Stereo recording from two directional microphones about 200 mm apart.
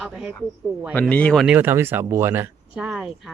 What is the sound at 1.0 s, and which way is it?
Speech, 5° left (ahead or behind).